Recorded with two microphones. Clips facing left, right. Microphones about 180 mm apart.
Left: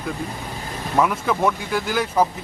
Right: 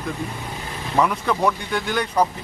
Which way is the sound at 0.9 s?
Centre (ahead or behind).